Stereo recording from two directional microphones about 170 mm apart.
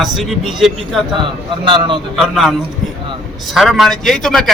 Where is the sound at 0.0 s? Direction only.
Centre (ahead or behind).